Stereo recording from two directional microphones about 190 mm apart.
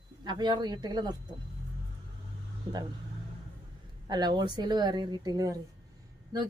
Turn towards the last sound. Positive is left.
turn(degrees=-20)  # may be behind; listen again after turning